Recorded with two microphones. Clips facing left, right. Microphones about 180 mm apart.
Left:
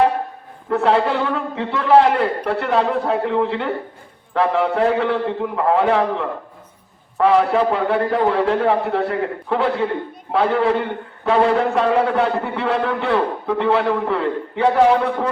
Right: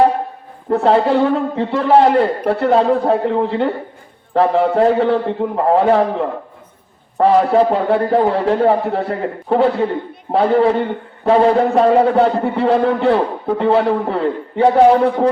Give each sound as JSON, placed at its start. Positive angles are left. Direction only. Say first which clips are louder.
{"t": 0.7, "sound": "a man's voice", "louder": "right 4 dB", "side_deg": -35}